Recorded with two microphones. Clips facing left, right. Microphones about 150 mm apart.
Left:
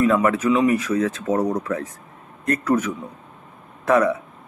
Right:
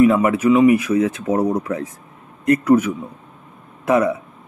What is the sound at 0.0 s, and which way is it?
A man's voice, 10° right (ahead or behind).